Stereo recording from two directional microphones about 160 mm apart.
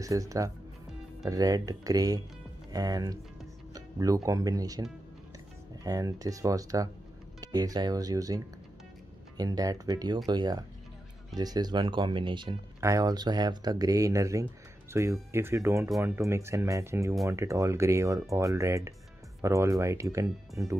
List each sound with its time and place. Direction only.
0.0 s speech: 20° right (ahead or behind)
5.9 s speech: 20° right (ahead or behind)